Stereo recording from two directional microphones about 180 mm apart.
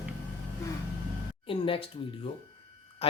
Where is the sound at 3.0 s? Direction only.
35° left (ahead or behind).